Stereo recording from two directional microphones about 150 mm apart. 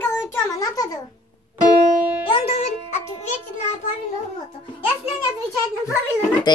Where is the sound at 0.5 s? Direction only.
25° left (ahead or behind).